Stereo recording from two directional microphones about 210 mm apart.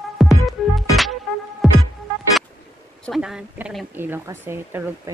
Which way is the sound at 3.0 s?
Centre (ahead or behind).